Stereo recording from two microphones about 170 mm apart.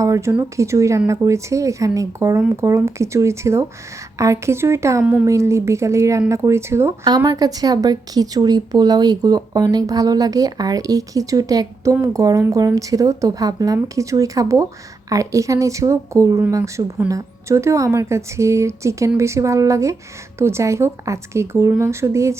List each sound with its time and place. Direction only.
0.0 s a woman's voice: 15° right (ahead or behind)